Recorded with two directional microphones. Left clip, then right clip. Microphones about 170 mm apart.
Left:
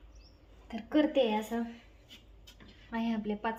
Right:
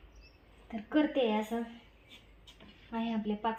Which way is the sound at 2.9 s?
10° left (ahead or behind).